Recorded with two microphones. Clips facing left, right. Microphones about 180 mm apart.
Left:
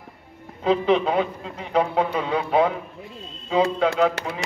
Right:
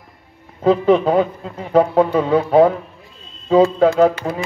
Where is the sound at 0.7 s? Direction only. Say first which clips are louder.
Right 6 dB; 45° right (ahead or behind).